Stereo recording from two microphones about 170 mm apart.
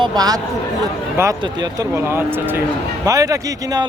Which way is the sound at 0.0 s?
25° right (ahead or behind).